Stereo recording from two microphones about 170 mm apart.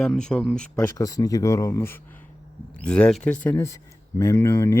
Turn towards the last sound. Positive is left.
turn(degrees=15)  # may be behind; listen again after turning